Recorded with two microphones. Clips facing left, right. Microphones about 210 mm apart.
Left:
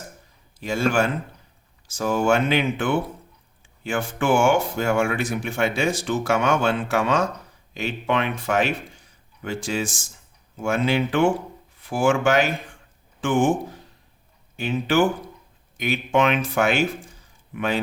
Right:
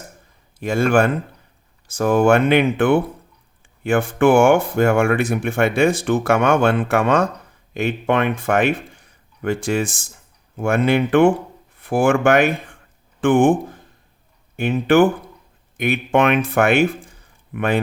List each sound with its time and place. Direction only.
0.6 s a man's voice: 55° right (ahead or behind)